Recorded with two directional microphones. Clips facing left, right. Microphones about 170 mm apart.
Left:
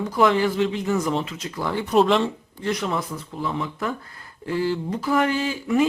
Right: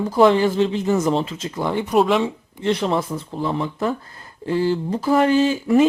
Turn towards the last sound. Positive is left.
turn(degrees=-30)  # may be behind; listen again after turning